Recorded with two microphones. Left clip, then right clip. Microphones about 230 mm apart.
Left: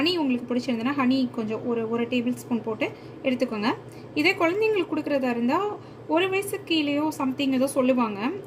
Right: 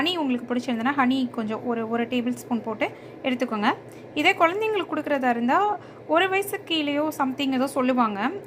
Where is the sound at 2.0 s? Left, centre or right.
Right.